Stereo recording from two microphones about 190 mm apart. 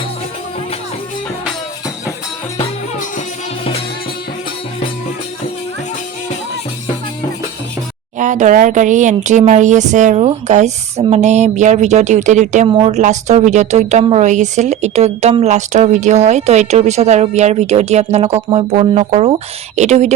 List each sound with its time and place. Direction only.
8.2 s speech: 40° right (ahead or behind)
12.6 s a woman's voice: 25° right (ahead or behind)
12.9 s speech: 40° right (ahead or behind)